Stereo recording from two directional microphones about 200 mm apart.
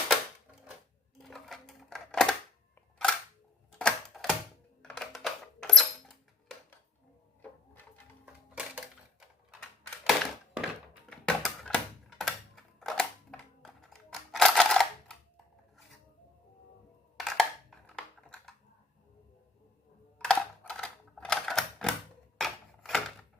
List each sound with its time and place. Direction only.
1.2 s typewriter: centre (ahead or behind)
3.7 s typewriter: 5° left (ahead or behind)
4.8 s a sound: 5° left (ahead or behind)
8.2 s a sound: 5° right (ahead or behind)
10.1 s crushing: centre (ahead or behind)
11.1 s typewriter: 5° left (ahead or behind)
17.2 s a sound: centre (ahead or behind)
20.1 s typewriter: 5° left (ahead or behind)
22.4 s rub: centre (ahead or behind)